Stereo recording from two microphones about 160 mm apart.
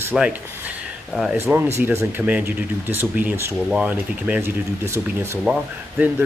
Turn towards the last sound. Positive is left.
turn(degrees=-10)  # may be behind; listen again after turning